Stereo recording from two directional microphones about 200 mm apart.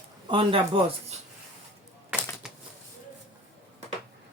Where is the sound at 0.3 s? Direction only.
25° right (ahead or behind).